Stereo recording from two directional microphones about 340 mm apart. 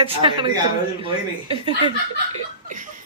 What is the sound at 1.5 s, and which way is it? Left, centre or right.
Speech, centre.